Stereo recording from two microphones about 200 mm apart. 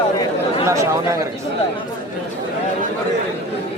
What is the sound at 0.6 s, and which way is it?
Speech, 15° right (ahead or behind).